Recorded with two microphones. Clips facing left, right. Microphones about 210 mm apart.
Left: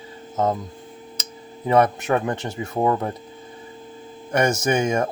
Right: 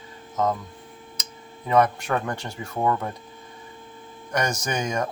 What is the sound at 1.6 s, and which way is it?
Speech, 25° left (ahead or behind).